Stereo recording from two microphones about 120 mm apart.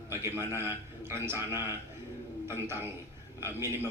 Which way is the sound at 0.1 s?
20° right (ahead or behind).